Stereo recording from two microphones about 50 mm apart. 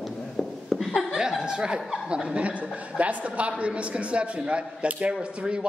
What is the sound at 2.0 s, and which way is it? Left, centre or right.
A woman's voice, centre.